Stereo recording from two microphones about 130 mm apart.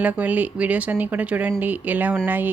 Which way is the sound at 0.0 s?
10° right (ahead or behind).